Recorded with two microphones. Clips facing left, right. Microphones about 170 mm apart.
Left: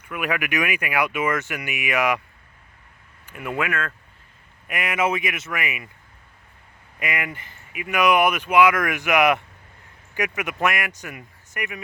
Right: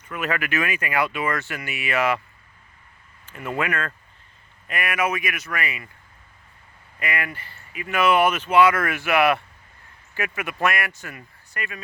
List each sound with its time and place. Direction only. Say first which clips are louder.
0.0 s speech: left 1 dB; 10° left (ahead or behind)
3.2 s speech: even; 10° left (ahead or behind)
4.7 s speech: left 1 dB; 20° left (ahead or behind)
7.0 s speech: even; 15° left (ahead or behind)